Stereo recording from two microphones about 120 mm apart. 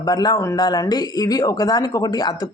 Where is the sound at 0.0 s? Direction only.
35° left (ahead or behind).